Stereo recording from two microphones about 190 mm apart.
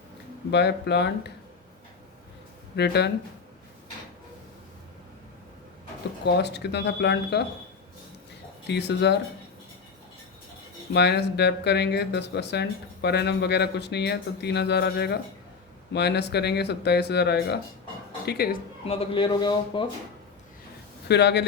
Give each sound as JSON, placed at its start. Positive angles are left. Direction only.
{"t": 0.5, "sound": "speech", "side_deg": 65}
{"t": 2.7, "sound": "speech", "side_deg": 60}
{"t": 6.2, "sound": "speech", "side_deg": 60}
{"t": 8.6, "sound": "speech", "side_deg": 65}
{"t": 10.9, "sound": "speech", "side_deg": 60}
{"t": 18.9, "sound": "a man's voice", "side_deg": 30}
{"t": 21.1, "sound": "speech", "side_deg": 65}